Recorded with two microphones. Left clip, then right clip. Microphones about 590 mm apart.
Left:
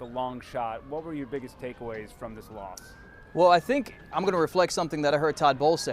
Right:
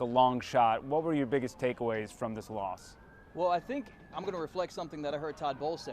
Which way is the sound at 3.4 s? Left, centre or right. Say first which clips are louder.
Left 11 dB; left.